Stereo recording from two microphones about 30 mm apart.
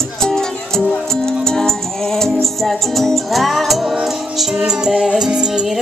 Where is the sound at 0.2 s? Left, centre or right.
Centre.